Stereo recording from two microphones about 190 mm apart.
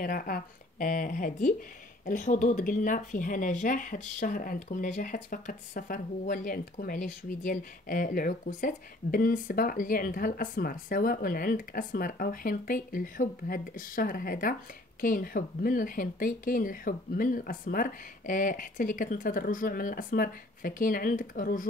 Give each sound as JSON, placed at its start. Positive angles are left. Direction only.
{"t": 0.0, "sound": "speech", "side_deg": 50}